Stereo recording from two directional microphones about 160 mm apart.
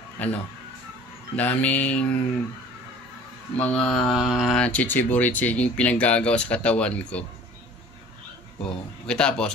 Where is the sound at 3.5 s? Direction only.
10° left (ahead or behind).